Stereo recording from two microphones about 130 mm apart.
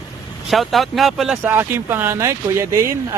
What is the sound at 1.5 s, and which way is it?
Speech, 15° right (ahead or behind).